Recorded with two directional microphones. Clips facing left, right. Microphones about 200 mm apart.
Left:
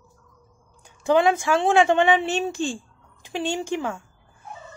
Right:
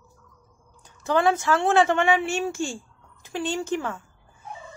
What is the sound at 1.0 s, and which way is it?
Speech, 15° left (ahead or behind).